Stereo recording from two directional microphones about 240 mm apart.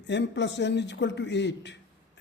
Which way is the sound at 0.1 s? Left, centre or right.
Left.